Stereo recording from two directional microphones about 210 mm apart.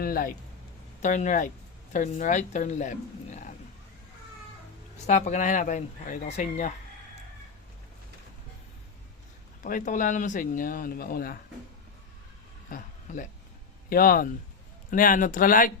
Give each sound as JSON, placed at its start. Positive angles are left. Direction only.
{"t": 0.0, "sound": "speech", "side_deg": 45}
{"t": 5.0, "sound": "speech", "side_deg": 35}
{"t": 9.6, "sound": "speech", "side_deg": 40}
{"t": 12.7, "sound": "a sound", "side_deg": 40}
{"t": 13.9, "sound": "speech", "side_deg": 45}